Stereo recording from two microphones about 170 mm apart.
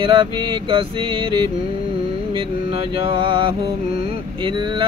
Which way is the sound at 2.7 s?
30° right (ahead or behind).